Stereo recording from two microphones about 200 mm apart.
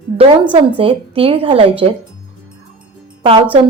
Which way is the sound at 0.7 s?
30° right (ahead or behind).